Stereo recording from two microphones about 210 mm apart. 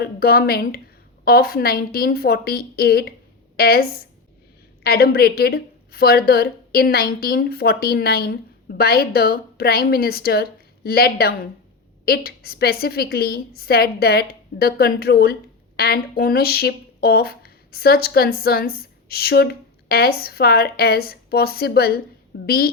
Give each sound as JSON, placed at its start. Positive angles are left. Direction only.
{"t": 0.0, "sound": "a woman's voice", "side_deg": 45}